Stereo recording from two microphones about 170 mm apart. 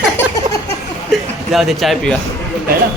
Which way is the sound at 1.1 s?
Centre (ahead or behind).